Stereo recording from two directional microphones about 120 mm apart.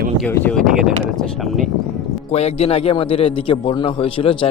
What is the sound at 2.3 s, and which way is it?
A man's voice, 60° left (ahead or behind).